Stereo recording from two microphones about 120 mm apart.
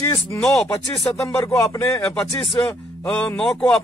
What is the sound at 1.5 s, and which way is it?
Speech, 25° left (ahead or behind).